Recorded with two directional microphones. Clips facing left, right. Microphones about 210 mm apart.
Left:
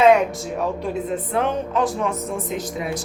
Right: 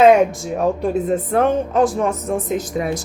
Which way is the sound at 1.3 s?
45° right (ahead or behind).